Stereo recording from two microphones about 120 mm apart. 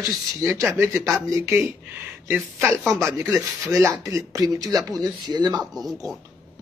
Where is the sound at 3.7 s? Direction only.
25° right (ahead or behind).